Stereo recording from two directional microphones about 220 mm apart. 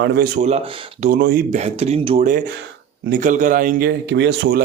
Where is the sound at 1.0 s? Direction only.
40° right (ahead or behind).